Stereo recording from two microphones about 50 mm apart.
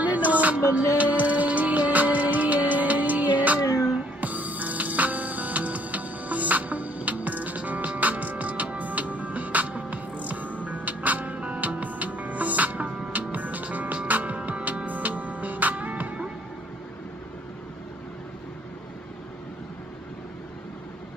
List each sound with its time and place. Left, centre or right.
0.0 s music: right